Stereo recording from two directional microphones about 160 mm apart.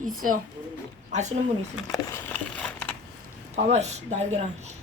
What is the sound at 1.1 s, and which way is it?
Speech, 45° right (ahead or behind).